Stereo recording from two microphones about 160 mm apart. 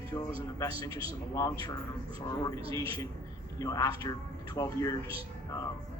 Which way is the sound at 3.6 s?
20° left (ahead or behind).